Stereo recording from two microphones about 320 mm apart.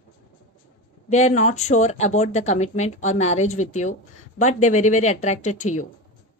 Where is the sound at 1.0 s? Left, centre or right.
Left.